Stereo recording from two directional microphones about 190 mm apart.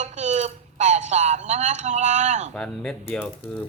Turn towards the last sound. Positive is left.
turn(degrees=10)  # may be behind; listen again after turning